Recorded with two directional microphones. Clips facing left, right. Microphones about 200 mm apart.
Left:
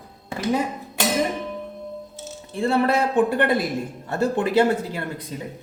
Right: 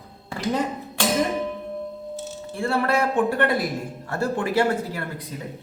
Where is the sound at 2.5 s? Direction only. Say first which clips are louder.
Left 3 dB; 20° left (ahead or behind).